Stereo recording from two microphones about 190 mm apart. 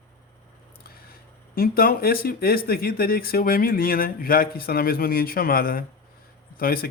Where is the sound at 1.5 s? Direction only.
50° left (ahead or behind).